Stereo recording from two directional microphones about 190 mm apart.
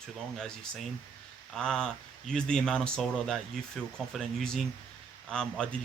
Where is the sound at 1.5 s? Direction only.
5° left (ahead or behind).